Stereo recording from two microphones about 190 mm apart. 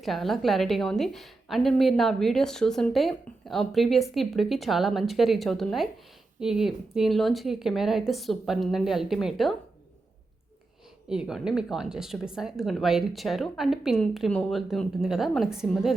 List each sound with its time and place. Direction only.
0.0 s a woman's voice: centre (ahead or behind)
11.1 s a woman's voice: 5° right (ahead or behind)